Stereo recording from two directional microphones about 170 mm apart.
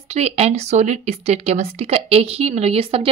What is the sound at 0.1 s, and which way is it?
A woman's voice, 40° right (ahead or behind).